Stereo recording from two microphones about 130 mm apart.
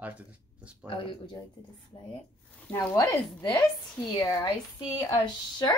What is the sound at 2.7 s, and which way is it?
Speech, 25° left (ahead or behind).